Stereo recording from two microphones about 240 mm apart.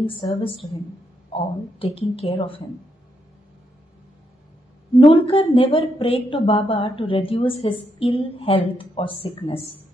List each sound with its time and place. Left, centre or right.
0.0 s a woman's voice: left
4.9 s a woman's voice: left